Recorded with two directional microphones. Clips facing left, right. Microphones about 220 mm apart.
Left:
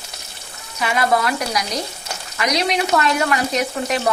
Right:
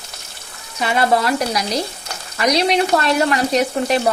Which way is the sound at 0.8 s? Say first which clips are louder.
Right 2 dB; 30° right (ahead or behind).